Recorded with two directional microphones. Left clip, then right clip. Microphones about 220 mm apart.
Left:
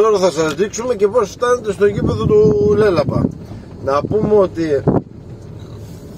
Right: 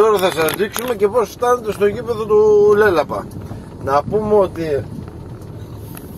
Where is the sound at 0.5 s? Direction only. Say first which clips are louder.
Left 2 dB; 25° left (ahead or behind).